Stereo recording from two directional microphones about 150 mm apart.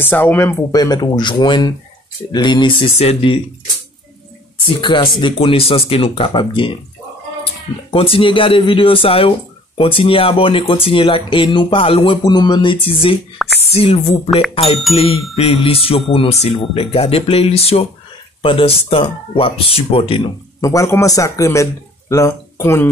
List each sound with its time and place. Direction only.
0.0 s speech: 15° left (ahead or behind); by 2.9 s 30° left (ahead or behind)
3.0 s speech: 40° left (ahead or behind)
4.6 s speech: 35° left (ahead or behind)
7.9 s speech: 35° left (ahead or behind)
20.6 s speech: 20° left (ahead or behind)